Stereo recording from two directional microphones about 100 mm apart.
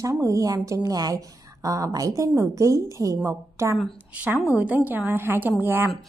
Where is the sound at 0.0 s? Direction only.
30° right (ahead or behind).